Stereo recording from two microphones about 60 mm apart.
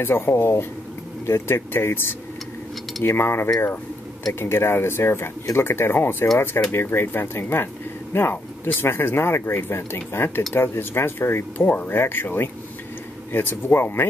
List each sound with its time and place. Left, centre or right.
0.0 s speech: left